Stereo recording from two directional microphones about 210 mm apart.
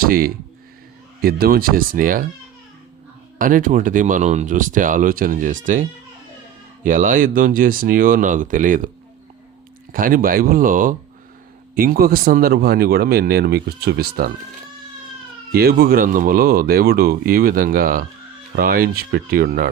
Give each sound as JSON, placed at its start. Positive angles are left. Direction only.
{"t": 0.0, "sound": "speech", "side_deg": -45}
{"t": 3.3, "sound": "speech", "side_deg": -40}
{"t": 6.8, "sound": "speech", "side_deg": -40}
{"t": 9.9, "sound": "speech", "side_deg": -40}
{"t": 15.5, "sound": "speech", "side_deg": -50}